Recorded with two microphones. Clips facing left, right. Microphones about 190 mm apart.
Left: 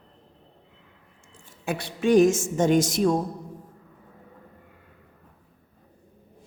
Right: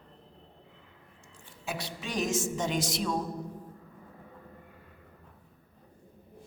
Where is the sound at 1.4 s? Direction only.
50° left (ahead or behind).